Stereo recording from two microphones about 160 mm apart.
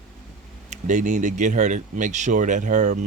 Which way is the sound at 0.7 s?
50° right (ahead or behind).